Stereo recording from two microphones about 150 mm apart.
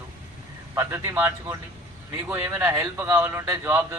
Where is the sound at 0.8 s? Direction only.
15° right (ahead or behind).